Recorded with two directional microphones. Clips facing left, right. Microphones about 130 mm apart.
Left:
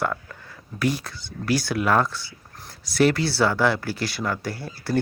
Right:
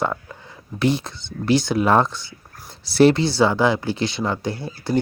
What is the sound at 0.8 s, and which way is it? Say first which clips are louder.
Speech: right 4 dB; 25° right (ahead or behind).